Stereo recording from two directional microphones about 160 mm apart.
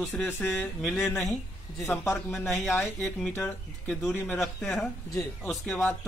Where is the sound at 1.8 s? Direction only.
15° left (ahead or behind).